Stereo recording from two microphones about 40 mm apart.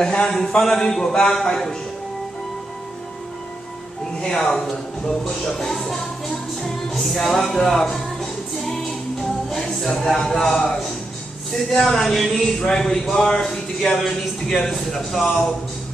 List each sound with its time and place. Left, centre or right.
0.0 s speech: centre
4.2 s speech: centre
5.2 s music: centre
9.8 s speech: centre
11.5 s speech: centre